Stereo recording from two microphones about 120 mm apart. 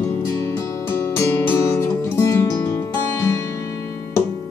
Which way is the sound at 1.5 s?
25° left (ahead or behind).